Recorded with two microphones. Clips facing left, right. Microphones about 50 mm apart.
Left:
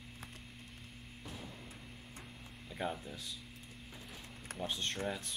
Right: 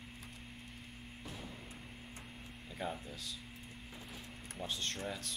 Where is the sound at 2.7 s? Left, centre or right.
Centre.